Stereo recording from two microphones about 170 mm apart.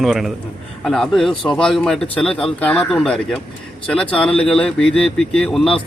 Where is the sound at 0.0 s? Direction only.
Centre (ahead or behind).